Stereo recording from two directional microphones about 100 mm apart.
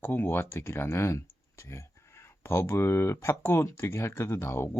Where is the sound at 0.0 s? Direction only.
20° left (ahead or behind).